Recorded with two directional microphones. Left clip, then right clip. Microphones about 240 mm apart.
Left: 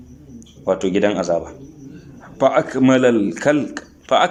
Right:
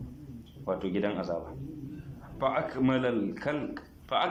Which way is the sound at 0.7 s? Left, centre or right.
Left.